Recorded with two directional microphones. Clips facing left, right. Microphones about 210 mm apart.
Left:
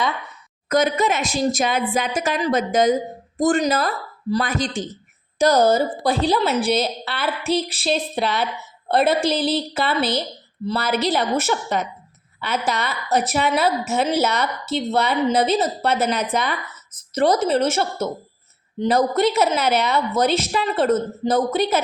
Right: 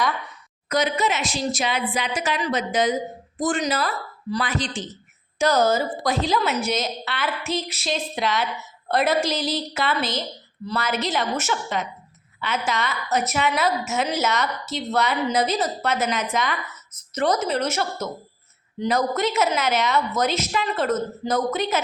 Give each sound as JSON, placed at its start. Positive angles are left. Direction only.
{"t": 0.7, "sound": "a woman's voice", "side_deg": 50}
{"t": 5.4, "sound": "a woman's voice", "side_deg": 35}